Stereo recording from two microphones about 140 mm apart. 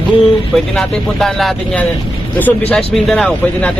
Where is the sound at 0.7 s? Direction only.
Centre (ahead or behind).